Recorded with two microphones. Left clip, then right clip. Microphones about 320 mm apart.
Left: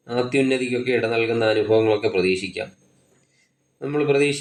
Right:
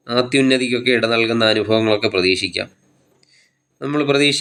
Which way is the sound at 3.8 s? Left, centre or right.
Right.